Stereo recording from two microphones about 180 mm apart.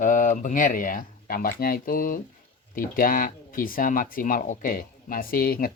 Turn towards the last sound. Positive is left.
turn(degrees=55)  # may be behind; listen again after turning